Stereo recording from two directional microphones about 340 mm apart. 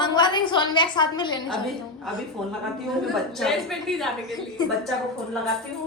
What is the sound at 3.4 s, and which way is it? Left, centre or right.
Speech, centre.